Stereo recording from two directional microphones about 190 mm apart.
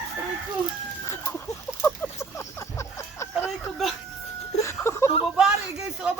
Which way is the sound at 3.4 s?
Centre (ahead or behind).